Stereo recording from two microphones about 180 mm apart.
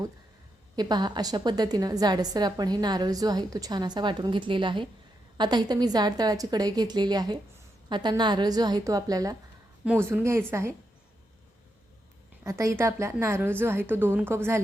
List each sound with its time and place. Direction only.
0.8 s a woman's voice: 25° right (ahead or behind)
9.8 s a woman's voice: 10° right (ahead or behind)
12.5 s a woman's voice: 15° right (ahead or behind)